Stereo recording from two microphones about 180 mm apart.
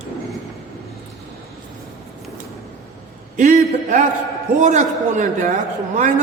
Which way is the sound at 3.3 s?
45° right (ahead or behind).